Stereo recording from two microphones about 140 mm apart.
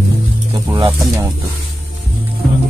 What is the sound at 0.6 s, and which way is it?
Speech, 25° right (ahead or behind).